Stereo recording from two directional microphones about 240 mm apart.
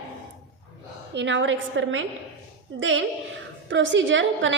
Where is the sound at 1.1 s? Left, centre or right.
Right.